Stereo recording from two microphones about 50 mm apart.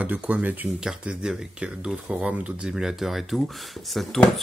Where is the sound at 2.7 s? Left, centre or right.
Centre.